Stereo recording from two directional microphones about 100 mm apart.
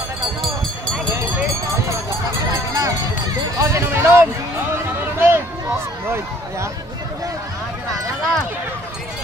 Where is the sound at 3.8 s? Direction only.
25° right (ahead or behind).